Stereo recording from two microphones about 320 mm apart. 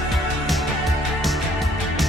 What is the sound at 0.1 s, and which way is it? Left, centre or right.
Music, centre.